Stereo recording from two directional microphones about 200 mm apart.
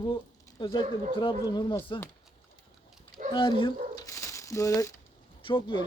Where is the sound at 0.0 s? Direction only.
20° left (ahead or behind).